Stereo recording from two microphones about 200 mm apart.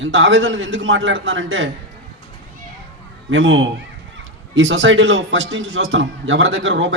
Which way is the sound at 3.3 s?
70° right (ahead or behind).